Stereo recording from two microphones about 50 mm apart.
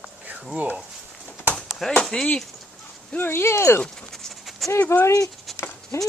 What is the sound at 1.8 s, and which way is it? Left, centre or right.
Speech, centre.